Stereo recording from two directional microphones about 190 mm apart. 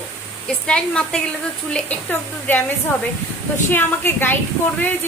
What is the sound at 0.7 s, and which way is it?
Speech, 5° left (ahead or behind).